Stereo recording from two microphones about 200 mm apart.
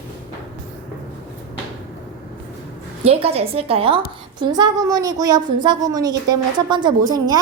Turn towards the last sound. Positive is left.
turn(degrees=-20)  # may be behind; listen again after turning